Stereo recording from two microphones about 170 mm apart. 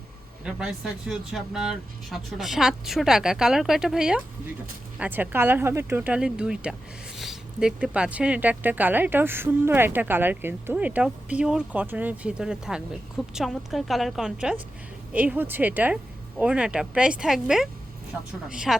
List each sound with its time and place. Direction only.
0.4 s speech: 5° right (ahead or behind)